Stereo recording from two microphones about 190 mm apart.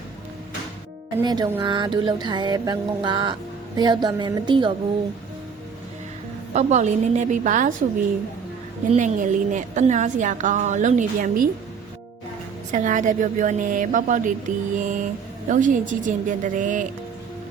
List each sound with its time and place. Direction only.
1.2 s music: 20° right (ahead or behind)
6.5 s a woman's voice: 35° right (ahead or behind)
8.9 s a woman's voice: 40° right (ahead or behind)
12.7 s a woman's voice: 40° right (ahead or behind)